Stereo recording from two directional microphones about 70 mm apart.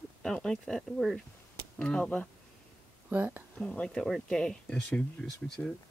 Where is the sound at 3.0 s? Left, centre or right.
Right.